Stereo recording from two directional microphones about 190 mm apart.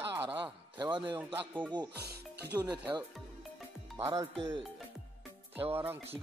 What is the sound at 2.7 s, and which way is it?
Speech, 25° right (ahead or behind).